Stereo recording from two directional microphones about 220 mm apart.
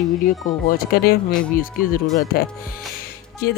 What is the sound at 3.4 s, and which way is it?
Speech, 45° left (ahead or behind).